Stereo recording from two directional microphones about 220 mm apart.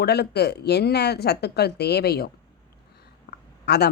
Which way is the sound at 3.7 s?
50° left (ahead or behind).